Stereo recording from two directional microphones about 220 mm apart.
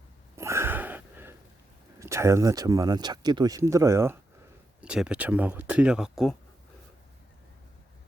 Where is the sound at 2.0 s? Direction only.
15° right (ahead or behind).